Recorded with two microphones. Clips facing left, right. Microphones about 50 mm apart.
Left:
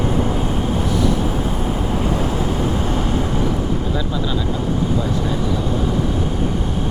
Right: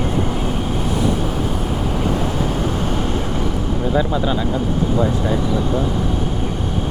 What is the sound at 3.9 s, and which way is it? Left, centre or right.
Speech, right.